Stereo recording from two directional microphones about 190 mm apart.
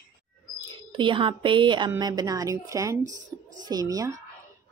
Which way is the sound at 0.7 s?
25° right (ahead or behind).